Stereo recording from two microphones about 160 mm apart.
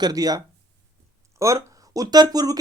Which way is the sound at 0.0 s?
25° right (ahead or behind).